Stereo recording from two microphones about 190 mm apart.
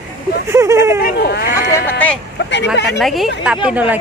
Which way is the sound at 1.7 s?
10° left (ahead or behind).